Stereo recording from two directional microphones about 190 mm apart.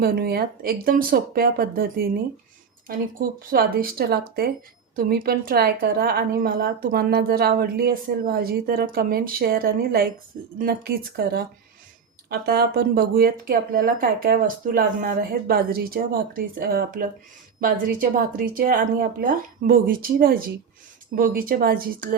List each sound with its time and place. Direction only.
0.0 s a woman's voice: 55° right (ahead or behind)